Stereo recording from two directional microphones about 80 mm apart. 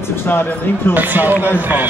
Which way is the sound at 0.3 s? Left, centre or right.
Left.